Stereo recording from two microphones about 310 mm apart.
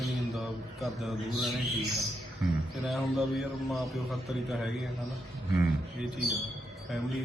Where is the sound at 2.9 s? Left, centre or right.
Centre.